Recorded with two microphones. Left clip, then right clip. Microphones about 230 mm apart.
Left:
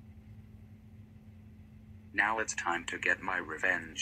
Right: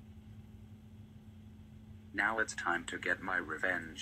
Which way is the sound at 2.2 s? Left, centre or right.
Right.